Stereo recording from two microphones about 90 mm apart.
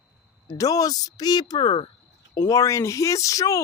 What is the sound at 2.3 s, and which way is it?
Speech, 35° left (ahead or behind).